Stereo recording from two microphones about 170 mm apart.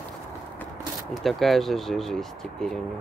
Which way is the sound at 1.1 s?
Centre (ahead or behind).